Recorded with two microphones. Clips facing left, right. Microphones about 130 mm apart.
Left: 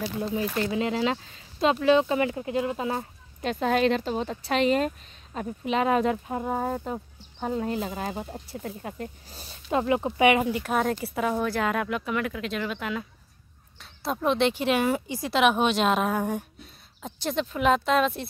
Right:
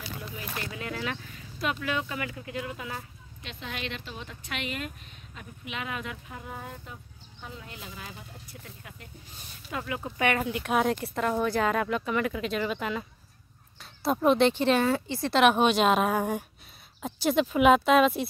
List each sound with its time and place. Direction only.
0.2 s speech: 30° left (ahead or behind)
3.0 s speech: 45° left (ahead or behind); by 10.1 s 30° left (ahead or behind)
10.1 s speech: 10° left (ahead or behind)
10.5 s speech: centre (ahead or behind)
14.0 s speech: 5° right (ahead or behind)